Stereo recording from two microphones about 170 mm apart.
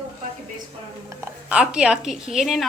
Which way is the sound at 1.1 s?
10° right (ahead or behind).